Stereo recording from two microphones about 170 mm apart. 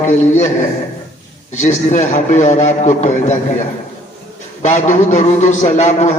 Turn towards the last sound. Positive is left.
turn(degrees=45)  # may be behind; listen again after turning